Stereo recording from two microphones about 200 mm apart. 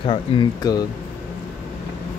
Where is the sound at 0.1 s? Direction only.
20° left (ahead or behind).